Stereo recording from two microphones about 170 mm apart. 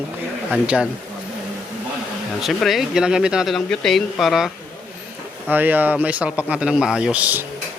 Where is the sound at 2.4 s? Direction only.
Centre (ahead or behind).